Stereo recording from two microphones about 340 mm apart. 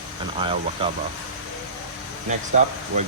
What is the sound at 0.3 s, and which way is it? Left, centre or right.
Speech, centre.